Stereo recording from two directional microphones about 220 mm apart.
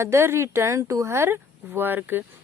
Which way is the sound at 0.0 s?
10° right (ahead or behind).